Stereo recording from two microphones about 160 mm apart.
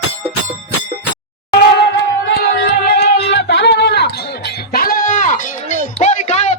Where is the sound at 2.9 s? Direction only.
90° left.